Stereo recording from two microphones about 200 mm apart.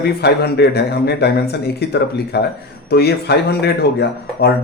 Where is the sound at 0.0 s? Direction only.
55° left (ahead or behind).